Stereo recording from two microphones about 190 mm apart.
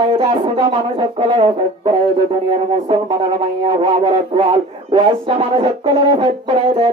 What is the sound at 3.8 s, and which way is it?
Speech, 30° right (ahead or behind).